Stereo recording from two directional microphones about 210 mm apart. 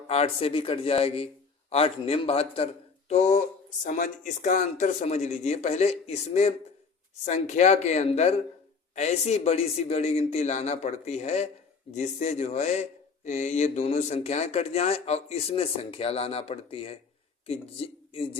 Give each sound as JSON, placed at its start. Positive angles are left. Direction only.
{"t": 0.1, "sound": "speech", "side_deg": 30}